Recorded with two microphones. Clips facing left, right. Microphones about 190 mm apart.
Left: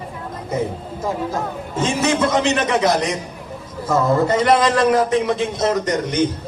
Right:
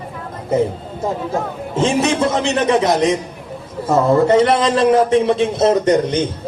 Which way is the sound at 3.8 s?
25° right (ahead or behind).